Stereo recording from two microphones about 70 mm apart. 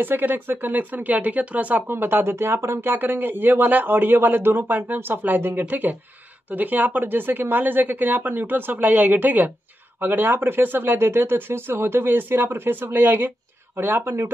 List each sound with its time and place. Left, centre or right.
0.0 s speech: right